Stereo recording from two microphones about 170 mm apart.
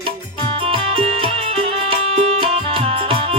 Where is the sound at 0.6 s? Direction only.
35° right (ahead or behind).